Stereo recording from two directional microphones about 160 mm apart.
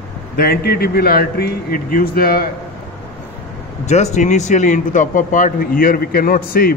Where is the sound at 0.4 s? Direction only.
75° left (ahead or behind).